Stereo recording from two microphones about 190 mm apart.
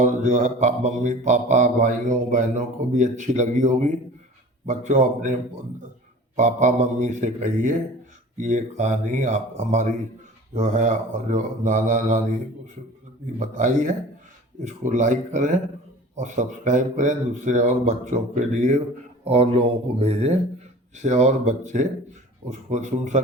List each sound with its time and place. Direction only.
0.0 s mantra: 40° right (ahead or behind)
13.4 s mantra: 40° right (ahead or behind)